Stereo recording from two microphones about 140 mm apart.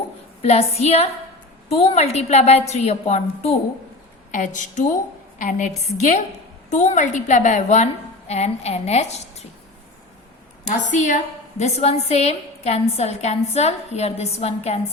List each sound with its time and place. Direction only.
0.4 s a woman's voice: 50° left (ahead or behind)
4.3 s a woman's voice: 65° left (ahead or behind)
10.6 s a woman's voice: 60° left (ahead or behind)